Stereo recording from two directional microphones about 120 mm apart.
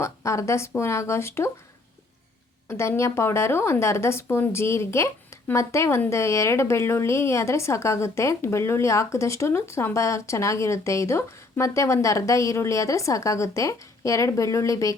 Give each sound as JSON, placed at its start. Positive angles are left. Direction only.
{"t": 0.0, "sound": "a woman's voice", "side_deg": 25}
{"t": 2.6, "sound": "a woman's voice", "side_deg": 20}